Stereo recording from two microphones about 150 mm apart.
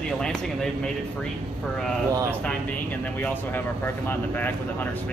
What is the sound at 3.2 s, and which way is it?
Speech, 15° left (ahead or behind).